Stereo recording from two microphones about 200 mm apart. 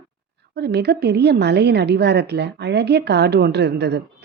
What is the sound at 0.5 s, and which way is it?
A woman's voice, 55° right (ahead or behind).